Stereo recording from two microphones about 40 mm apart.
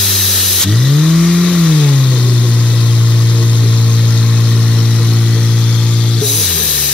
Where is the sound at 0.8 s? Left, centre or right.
Centre.